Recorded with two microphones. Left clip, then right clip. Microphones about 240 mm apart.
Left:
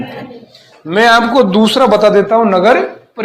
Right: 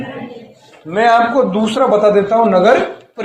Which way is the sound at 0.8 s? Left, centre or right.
Left.